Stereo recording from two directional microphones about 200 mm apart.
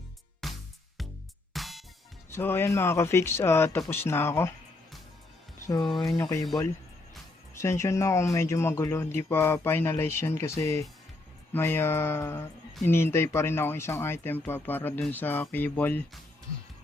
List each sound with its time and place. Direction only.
0.4 s music: centre (ahead or behind)
2.3 s speech: 10° left (ahead or behind)
5.8 s speech: centre (ahead or behind)
6.1 s speech: 15° left (ahead or behind)
7.5 s speech: 15° left (ahead or behind)